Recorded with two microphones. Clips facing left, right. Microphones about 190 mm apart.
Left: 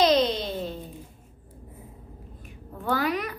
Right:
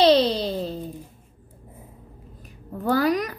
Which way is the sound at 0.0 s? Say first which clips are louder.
Right 4 dB; 30° right (ahead or behind).